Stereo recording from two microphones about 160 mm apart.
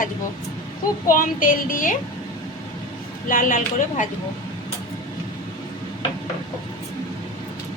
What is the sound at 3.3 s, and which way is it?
Speech, 55° left (ahead or behind).